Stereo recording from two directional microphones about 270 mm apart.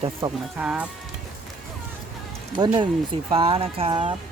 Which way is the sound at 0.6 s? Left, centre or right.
Centre.